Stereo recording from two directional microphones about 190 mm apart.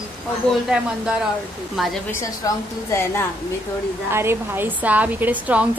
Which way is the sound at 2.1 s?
15° left (ahead or behind).